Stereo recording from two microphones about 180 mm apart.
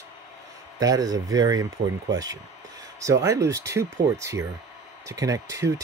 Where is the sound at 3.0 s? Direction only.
15° right (ahead or behind).